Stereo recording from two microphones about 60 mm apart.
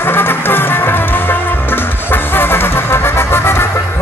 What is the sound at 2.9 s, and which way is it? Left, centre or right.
Vehicle, left.